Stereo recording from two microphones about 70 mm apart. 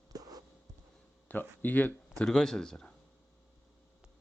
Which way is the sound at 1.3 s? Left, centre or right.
Left.